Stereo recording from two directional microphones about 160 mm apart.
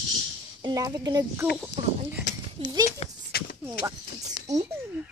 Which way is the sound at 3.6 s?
15° right (ahead or behind).